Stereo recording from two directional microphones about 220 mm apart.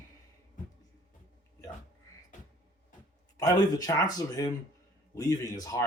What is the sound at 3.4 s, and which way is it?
Speech, 15° left (ahead or behind).